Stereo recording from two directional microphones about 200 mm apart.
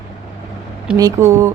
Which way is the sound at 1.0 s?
15° right (ahead or behind).